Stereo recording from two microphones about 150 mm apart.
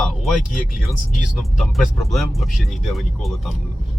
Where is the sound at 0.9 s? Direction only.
Centre (ahead or behind).